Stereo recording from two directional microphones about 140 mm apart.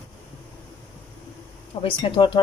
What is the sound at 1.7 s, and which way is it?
Speech, 40° left (ahead or behind).